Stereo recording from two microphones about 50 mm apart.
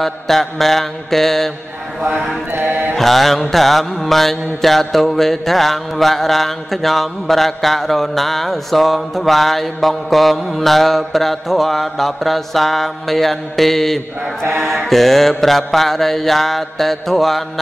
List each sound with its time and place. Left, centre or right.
0.0 s mantra: centre
2.6 s mantra: right
3.0 s mantra: centre
14.4 s mantra: right
14.7 s mantra: centre